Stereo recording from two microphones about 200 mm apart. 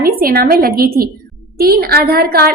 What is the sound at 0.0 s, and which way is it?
A woman's voice, 45° right (ahead or behind).